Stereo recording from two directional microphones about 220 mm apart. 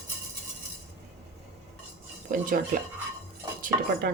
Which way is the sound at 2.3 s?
40° right (ahead or behind).